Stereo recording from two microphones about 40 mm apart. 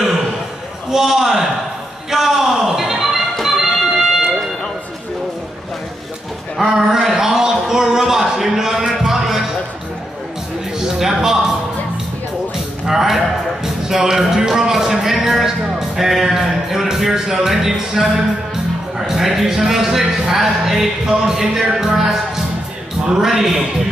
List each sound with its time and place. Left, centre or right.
0.8 s a man's voice: centre
2.0 s music: centre
6.6 s a man's voice: centre
7.0 s a sound: centre
10.8 s music: centre
12.8 s music: centre
13.8 s a sound: centre
16.0 s music: centre
18.9 s a sound: centre
21.3 s a man's voice: centre